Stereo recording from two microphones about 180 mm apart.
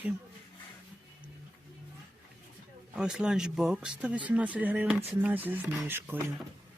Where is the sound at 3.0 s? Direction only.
5° right (ahead or behind).